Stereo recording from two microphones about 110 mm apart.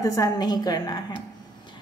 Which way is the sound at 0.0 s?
30° left (ahead or behind).